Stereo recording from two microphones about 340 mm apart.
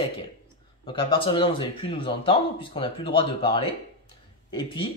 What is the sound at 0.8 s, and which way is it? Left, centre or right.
Speech, centre.